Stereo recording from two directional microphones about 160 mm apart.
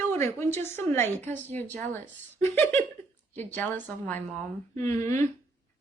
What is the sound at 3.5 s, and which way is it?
A woman's voice, 10° left (ahead or behind).